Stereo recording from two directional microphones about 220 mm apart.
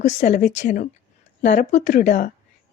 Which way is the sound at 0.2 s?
35° left (ahead or behind).